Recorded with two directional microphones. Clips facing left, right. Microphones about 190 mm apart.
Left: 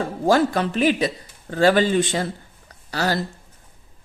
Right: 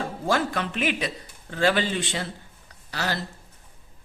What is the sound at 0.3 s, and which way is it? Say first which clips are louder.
Speech: left 7 dB; 35° left (ahead or behind).